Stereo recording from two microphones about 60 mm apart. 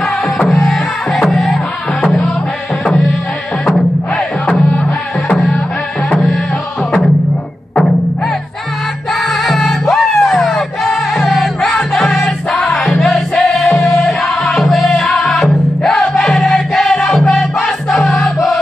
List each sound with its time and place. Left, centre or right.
0.6 s music: centre
2.8 s music: centre
4.5 s music: left
9.3 s music: centre